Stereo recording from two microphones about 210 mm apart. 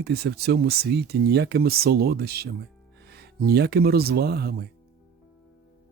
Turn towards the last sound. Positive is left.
turn(degrees=-50)  # may be behind; listen again after turning